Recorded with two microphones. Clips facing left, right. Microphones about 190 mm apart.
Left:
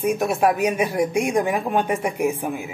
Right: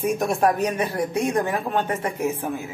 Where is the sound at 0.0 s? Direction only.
Centre (ahead or behind).